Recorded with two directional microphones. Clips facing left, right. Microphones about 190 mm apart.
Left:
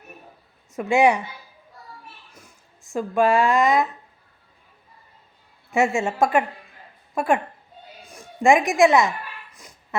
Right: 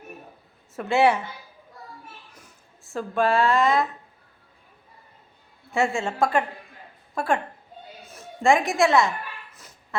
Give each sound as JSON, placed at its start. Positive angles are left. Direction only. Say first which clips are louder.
{"t": 0.7, "sound": "speech", "louder": "left 2 dB", "side_deg": 15}
{"t": 2.3, "sound": "a sound", "louder": "left 1 dB", "side_deg": 10}
{"t": 5.7, "sound": "a woman's voice", "louder": "left 3 dB", "side_deg": 20}
{"t": 8.0, "sound": "a woman's voice", "louder": "left 3 dB", "side_deg": 15}
{"t": 9.6, "sound": "quack", "louder": "left 3 dB", "side_deg": 15}